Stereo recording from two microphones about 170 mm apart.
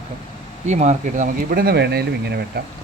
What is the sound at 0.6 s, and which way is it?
Speech, 45° right (ahead or behind).